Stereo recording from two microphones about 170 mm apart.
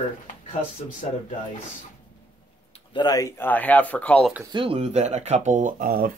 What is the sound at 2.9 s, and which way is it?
Speech, 25° left (ahead or behind).